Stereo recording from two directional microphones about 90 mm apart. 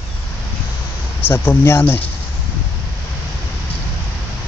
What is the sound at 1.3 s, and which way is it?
Speech, 25° left (ahead or behind).